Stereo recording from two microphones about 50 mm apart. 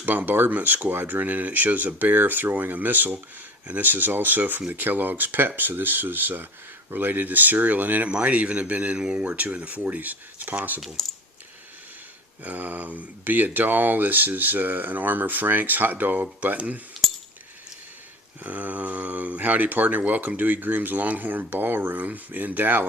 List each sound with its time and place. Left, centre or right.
0.0 s speech: right
10.8 s speech: centre
12.4 s speech: right
18.4 s speech: right